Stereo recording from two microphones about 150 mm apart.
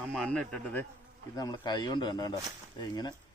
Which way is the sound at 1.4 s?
30° left (ahead or behind).